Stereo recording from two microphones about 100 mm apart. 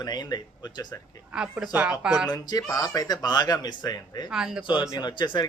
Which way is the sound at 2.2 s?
40° left (ahead or behind).